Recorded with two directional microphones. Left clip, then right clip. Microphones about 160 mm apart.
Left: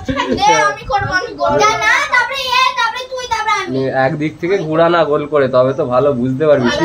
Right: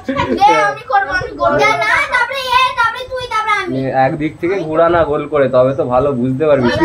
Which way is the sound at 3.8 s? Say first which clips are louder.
Right 2 dB; 15° left (ahead or behind).